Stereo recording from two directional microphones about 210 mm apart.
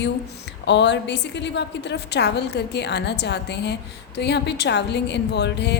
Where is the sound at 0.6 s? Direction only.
55° left (ahead or behind).